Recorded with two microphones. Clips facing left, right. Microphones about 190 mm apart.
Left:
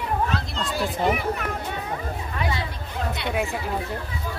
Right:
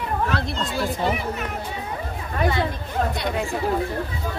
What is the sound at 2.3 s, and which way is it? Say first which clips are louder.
Speech: right 7 dB; 50° right (ahead or behind).